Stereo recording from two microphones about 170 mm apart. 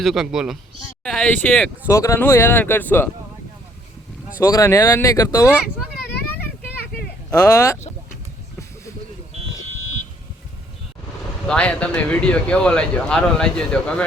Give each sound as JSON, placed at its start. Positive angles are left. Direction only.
{"t": 0.0, "sound": "speech", "side_deg": 0}
{"t": 4.4, "sound": "speech", "side_deg": 20}
{"t": 7.4, "sound": "speech", "side_deg": 20}
{"t": 11.4, "sound": "speech", "side_deg": 5}